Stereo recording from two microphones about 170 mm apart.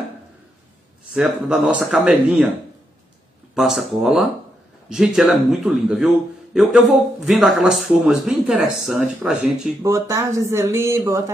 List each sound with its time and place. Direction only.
1.1 s speech: 5° right (ahead or behind)
3.5 s speech: centre (ahead or behind)
9.8 s speech: 20° right (ahead or behind)